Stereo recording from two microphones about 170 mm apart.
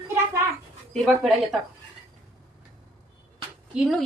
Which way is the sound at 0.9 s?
Centre (ahead or behind).